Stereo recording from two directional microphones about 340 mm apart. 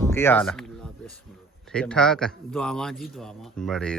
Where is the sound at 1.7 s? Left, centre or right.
Centre.